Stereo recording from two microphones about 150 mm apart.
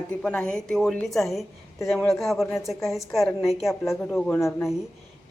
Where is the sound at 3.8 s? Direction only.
20° left (ahead or behind).